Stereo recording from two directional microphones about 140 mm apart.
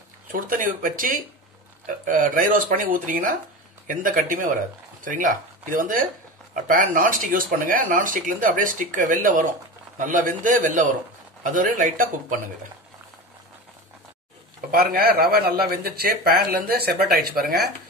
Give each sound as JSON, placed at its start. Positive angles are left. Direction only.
{"t": 0.3, "sound": "speech", "side_deg": -75}
{"t": 14.7, "sound": "speech", "side_deg": -90}